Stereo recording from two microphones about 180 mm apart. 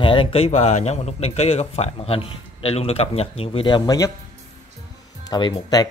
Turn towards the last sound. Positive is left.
turn(degrees=20)  # may be behind; listen again after turning